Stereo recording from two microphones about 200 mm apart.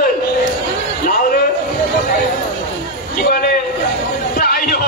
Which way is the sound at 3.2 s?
50° left (ahead or behind).